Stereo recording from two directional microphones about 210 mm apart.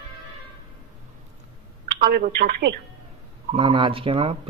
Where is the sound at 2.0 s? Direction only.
45° right (ahead or behind).